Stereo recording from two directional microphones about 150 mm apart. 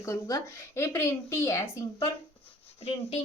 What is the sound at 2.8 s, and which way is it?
Speech, 45° left (ahead or behind).